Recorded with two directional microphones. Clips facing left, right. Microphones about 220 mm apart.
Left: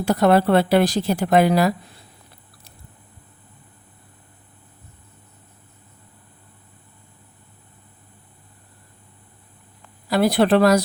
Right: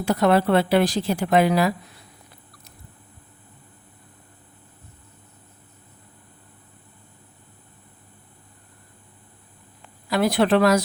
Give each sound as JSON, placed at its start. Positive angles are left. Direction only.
{"t": 0.0, "sound": "a woman's voice", "side_deg": 40}
{"t": 10.1, "sound": "a woman's voice", "side_deg": 35}